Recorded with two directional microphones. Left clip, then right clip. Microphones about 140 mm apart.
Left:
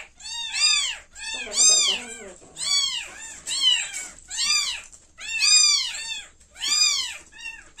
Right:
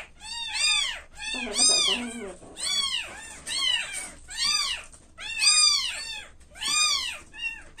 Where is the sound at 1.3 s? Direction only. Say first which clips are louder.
Left 3 dB; 25° left (ahead or behind).